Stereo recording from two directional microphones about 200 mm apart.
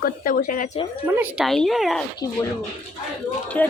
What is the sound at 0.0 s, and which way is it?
Speech, 45° left (ahead or behind).